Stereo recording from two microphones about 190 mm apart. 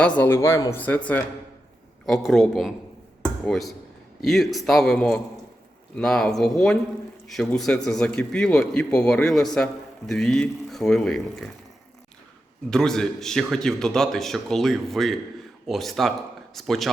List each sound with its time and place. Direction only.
0.2 s a man's voice: 15° left (ahead or behind)
12.7 s a man's voice: 5° left (ahead or behind)